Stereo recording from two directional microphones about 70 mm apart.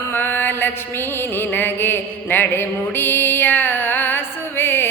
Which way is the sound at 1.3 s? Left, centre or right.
Left.